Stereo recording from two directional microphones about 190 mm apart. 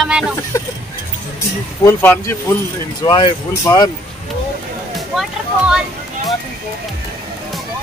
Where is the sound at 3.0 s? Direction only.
25° left (ahead or behind).